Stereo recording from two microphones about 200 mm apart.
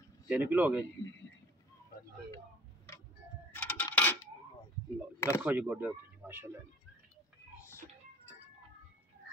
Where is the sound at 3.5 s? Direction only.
10° left (ahead or behind).